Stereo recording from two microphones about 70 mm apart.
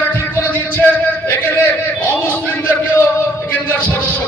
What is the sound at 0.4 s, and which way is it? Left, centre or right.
Music, left.